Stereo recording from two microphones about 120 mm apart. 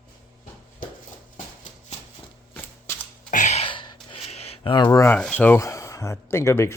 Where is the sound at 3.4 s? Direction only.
75° left (ahead or behind).